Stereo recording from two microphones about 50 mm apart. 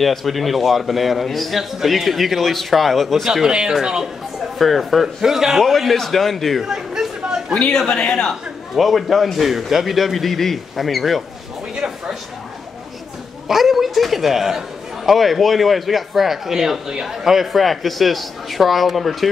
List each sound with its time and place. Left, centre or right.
0.0 s a man's voice: centre
3.8 s speech: centre
4.6 s a man's voice: centre
6.6 s chatter: centre
7.7 s a man's voice: centre
8.3 s a man's voice: centre
13.5 s a man's voice: centre